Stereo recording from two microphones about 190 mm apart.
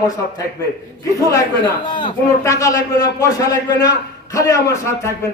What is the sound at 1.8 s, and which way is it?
A man's voice, 25° left (ahead or behind).